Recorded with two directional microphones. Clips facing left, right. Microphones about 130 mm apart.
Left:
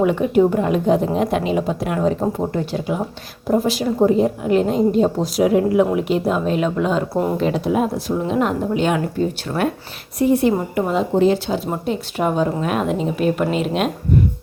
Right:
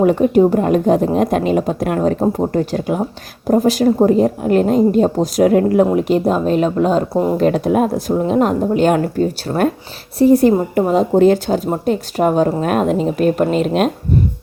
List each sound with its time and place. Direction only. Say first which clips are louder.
0.0 s a woman's voice: right 4 dB; 40° right (ahead or behind)
5.8 s speech: right 4 dB; 40° right (ahead or behind)
7.1 s speech: right 4 dB; 15° right (ahead or behind)
7.3 s a woman's voice: right 6 dB; 50° right (ahead or behind)
9.5 s speech: right 6 dB; 25° right (ahead or behind)
10.2 s a woman's voice: right 5 dB; 40° right (ahead or behind)